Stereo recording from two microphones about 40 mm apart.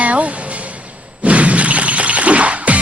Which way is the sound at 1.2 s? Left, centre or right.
Right.